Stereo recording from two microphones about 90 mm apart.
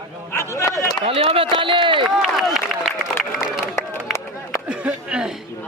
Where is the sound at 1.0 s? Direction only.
90° right; by 2.0 s 70° right (ahead or behind).